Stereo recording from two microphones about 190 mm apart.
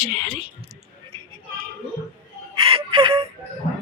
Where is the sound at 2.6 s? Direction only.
30° right (ahead or behind).